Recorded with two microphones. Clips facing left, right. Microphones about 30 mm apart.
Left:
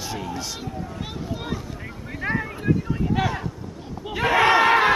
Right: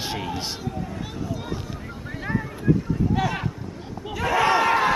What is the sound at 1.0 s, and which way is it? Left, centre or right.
Speech, left.